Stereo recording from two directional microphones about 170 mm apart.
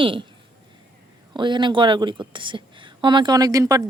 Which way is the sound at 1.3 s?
25° right (ahead or behind).